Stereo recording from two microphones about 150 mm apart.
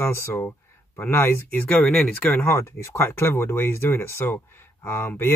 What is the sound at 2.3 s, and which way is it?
Speech, 15° left (ahead or behind).